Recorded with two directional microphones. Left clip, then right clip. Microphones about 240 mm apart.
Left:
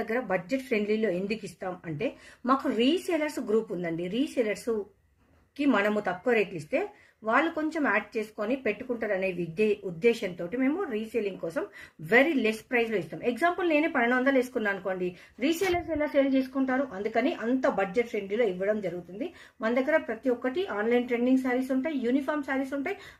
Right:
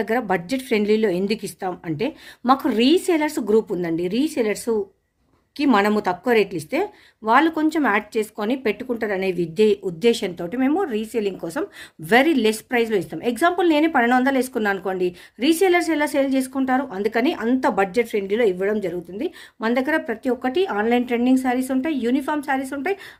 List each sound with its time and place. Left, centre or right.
0.0 s speech: right